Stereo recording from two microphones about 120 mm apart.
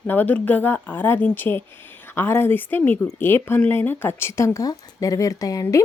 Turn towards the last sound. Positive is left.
turn(degrees=30)  # may be behind; listen again after turning